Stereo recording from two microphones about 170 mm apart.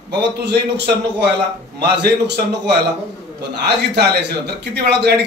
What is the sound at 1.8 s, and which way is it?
A man's voice, 75° right (ahead or behind).